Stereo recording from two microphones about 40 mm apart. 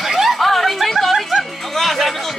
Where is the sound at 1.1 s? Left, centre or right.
Centre.